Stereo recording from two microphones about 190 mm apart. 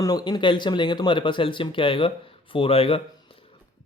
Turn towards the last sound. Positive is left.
turn(degrees=30)  # may be behind; listen again after turning